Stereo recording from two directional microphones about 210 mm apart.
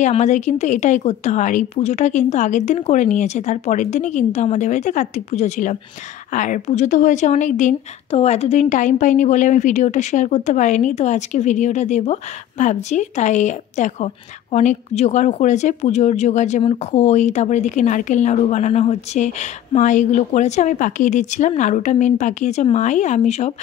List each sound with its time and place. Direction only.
0.0 s a woman's voice: 35° left (ahead or behind)